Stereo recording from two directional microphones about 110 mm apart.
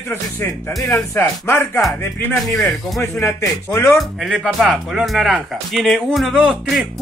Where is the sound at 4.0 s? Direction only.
5° right (ahead or behind).